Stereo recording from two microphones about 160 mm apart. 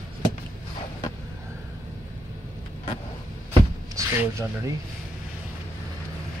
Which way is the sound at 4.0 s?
20° right (ahead or behind).